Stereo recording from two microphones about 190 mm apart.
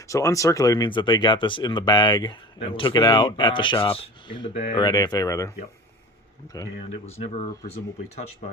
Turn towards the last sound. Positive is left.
turn(degrees=35)  # may be behind; listen again after turning